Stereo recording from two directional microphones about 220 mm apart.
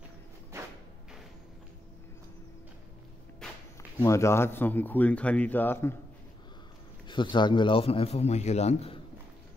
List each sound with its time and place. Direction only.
0.5 s music: 15° right (ahead or behind)
3.4 s walk: 5° left (ahead or behind)
4.0 s speech: 15° left (ahead or behind)
7.1 s a man's voice: 20° left (ahead or behind)